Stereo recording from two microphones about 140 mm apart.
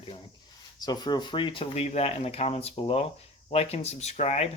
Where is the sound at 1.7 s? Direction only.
50° left (ahead or behind).